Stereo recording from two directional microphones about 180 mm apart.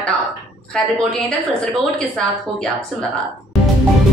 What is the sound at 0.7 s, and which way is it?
A woman's voice, 5° left (ahead or behind).